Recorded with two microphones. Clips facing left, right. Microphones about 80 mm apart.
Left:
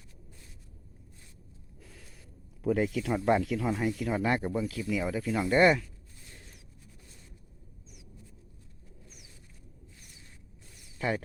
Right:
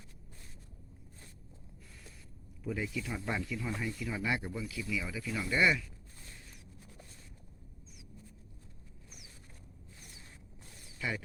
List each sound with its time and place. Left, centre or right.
2.6 s speech: left
3.4 s speech: left
10.9 s a sound: left